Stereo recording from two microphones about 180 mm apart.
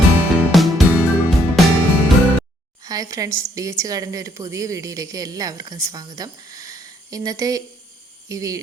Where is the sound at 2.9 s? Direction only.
20° right (ahead or behind).